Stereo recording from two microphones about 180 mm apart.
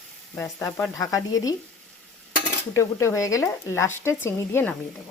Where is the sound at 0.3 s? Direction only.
15° left (ahead or behind).